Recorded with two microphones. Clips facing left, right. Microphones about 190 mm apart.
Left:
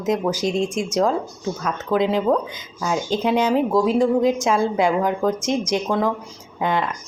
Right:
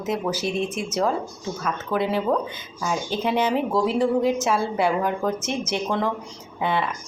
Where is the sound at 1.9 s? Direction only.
15° left (ahead or behind).